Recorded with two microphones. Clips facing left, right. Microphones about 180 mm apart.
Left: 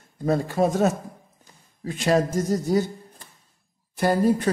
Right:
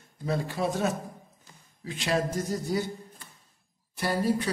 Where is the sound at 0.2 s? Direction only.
45° left (ahead or behind).